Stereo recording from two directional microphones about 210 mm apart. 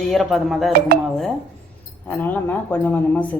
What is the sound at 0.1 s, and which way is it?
Speech, centre (ahead or behind).